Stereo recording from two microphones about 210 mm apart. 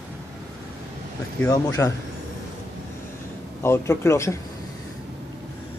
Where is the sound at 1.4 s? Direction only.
15° left (ahead or behind).